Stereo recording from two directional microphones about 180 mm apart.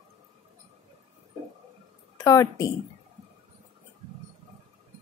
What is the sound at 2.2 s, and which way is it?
Speech, 20° left (ahead or behind).